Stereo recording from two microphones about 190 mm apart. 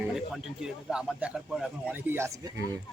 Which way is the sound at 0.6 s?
5° right (ahead or behind).